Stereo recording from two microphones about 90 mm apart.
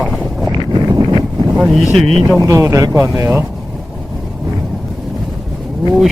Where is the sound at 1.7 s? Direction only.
5° left (ahead or behind).